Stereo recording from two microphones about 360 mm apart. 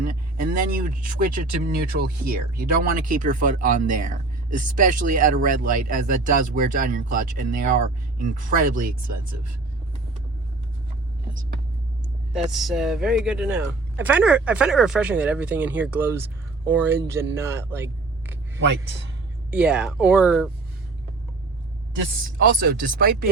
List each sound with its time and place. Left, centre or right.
0.0 s speech: right
12.3 s speech: centre
17.3 s a sound: centre
19.5 s speech: centre
22.6 s speech: right